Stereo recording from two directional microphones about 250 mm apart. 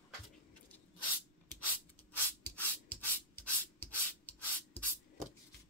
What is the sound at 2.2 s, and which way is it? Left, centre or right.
Rub, centre.